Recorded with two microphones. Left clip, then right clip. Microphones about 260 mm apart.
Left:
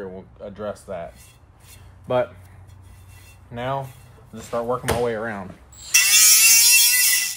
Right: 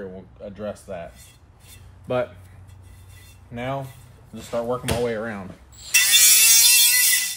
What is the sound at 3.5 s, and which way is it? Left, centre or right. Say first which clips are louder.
Speech: left 2 dB; centre.